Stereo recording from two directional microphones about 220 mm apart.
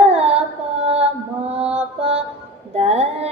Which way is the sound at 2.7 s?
30° right (ahead or behind).